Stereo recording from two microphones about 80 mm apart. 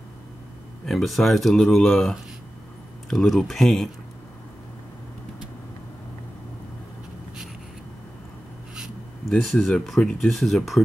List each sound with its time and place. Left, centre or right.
0.8 s speech: centre
9.3 s speech: centre